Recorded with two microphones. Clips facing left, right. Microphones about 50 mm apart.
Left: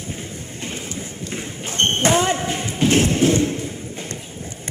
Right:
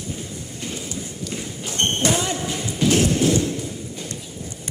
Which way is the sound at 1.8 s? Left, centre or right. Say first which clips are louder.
Left 4 dB; left.